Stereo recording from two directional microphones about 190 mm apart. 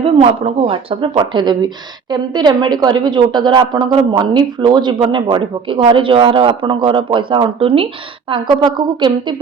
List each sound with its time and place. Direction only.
0.0 s speech: 30° right (ahead or behind)